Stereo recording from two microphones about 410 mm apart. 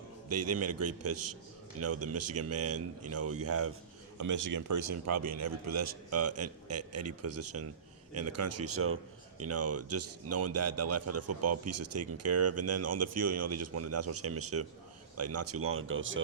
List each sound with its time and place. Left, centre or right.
0.3 s a man's voice: right
4.2 s a man's voice: right